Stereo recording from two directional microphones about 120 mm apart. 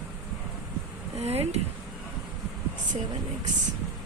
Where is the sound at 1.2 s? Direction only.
60° right (ahead or behind).